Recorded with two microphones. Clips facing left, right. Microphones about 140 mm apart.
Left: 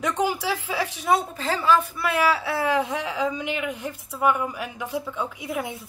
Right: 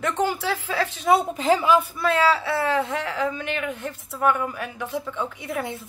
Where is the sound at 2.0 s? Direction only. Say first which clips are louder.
Right 2 dB; 10° left (ahead or behind).